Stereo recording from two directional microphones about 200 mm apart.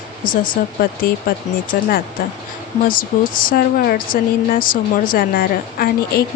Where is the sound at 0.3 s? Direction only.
45° left (ahead or behind).